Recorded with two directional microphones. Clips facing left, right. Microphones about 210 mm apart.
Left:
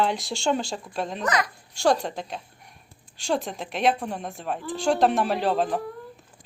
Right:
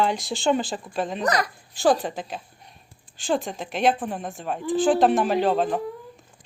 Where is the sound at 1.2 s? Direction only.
35° right (ahead or behind).